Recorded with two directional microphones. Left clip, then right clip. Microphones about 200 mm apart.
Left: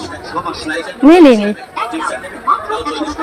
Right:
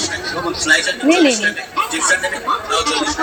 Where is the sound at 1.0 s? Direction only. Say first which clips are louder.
Left 9 dB; 40° left (ahead or behind).